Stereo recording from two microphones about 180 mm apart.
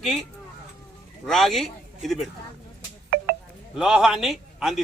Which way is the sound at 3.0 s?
55° right (ahead or behind).